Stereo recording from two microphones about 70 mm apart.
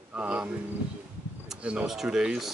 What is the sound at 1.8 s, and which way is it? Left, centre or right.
Speech, centre.